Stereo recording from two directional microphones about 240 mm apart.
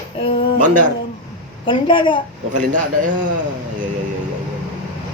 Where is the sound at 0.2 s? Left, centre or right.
Left.